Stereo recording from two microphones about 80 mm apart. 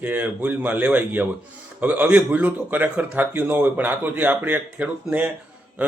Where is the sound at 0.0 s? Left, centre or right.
Right.